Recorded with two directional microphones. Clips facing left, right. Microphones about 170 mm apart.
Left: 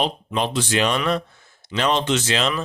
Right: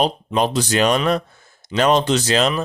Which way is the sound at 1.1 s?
45° right (ahead or behind).